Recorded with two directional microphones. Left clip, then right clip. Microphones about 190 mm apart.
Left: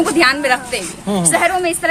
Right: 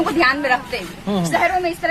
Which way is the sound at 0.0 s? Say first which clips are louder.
Left 3 dB; 30° left (ahead or behind).